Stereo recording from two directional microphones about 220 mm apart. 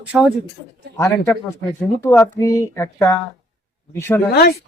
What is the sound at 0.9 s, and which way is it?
Speech, 10° left (ahead or behind).